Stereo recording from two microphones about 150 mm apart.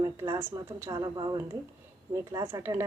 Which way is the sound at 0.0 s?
20° right (ahead or behind).